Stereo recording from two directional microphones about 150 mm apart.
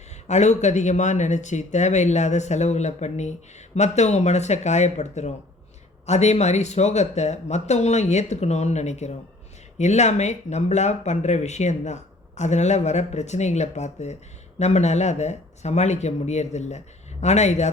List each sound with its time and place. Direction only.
0.3 s speech: 50° left (ahead or behind)